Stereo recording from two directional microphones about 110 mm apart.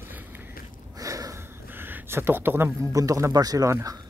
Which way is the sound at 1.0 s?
30° right (ahead or behind).